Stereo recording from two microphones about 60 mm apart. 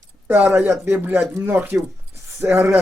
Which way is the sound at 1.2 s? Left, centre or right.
Right.